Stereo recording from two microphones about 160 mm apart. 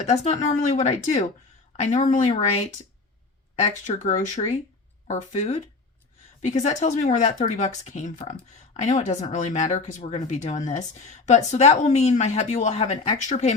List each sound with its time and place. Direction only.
0.0 s speech: 45° left (ahead or behind)